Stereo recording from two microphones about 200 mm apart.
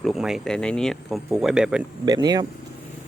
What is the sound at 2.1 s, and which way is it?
Speech, 20° right (ahead or behind).